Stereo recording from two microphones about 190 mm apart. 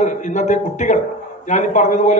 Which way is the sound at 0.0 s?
40° left (ahead or behind).